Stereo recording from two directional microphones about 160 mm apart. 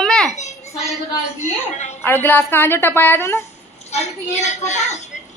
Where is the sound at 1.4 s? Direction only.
45° left (ahead or behind).